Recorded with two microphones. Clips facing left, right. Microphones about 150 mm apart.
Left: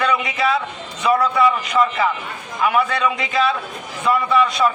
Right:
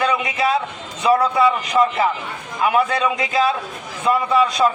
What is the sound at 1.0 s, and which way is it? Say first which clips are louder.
A man's voice: right 1 dB; 20° right (ahead or behind).